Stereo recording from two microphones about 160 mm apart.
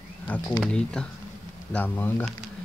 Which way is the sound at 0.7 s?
5° left (ahead or behind).